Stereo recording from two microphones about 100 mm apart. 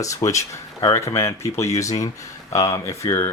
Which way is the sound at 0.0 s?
30° left (ahead or behind).